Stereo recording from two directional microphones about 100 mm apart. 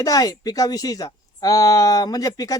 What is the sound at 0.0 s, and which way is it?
Speech, 35° left (ahead or behind).